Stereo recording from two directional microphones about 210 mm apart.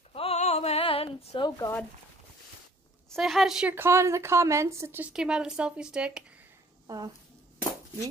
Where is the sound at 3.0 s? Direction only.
Centre (ahead or behind).